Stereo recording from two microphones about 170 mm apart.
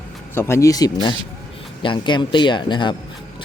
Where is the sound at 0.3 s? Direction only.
15° left (ahead or behind).